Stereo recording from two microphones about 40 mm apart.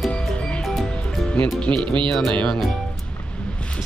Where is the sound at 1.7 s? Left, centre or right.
Centre.